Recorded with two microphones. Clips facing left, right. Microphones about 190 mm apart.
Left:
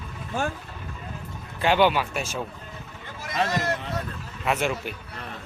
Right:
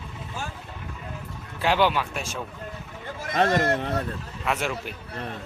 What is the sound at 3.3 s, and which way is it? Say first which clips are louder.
Speech: right 4 dB; 55° right (ahead or behind).